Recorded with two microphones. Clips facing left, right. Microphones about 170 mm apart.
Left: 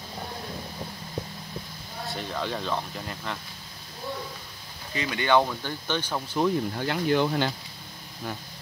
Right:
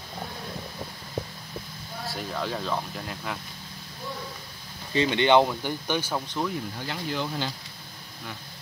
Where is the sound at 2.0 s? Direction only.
Centre (ahead or behind).